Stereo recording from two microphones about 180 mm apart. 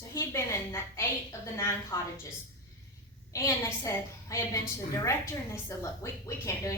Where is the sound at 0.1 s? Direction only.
15° left (ahead or behind).